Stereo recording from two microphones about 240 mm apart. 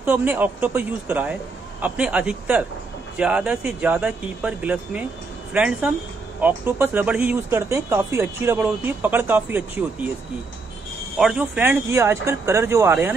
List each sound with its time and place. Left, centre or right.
0.0 s speech: centre
11.1 s speech: centre